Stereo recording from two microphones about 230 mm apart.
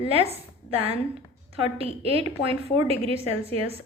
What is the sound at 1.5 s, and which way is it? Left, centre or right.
A woman's voice, right.